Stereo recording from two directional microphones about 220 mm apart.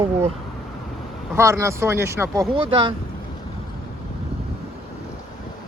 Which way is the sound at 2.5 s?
20° right (ahead or behind).